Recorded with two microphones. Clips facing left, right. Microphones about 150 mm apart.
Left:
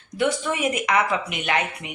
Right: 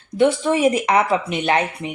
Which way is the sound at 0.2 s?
30° right (ahead or behind).